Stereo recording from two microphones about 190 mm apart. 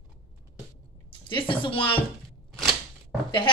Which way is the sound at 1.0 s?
25° left (ahead or behind).